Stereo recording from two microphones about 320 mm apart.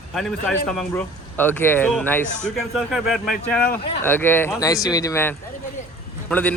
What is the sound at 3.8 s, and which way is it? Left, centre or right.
Speech, centre.